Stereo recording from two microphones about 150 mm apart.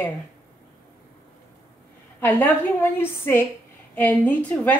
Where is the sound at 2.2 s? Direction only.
10° left (ahead or behind).